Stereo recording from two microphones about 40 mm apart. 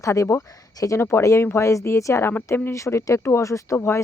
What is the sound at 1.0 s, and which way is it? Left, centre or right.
Speech, left.